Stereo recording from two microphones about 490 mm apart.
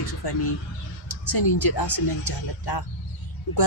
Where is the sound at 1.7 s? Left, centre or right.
Left.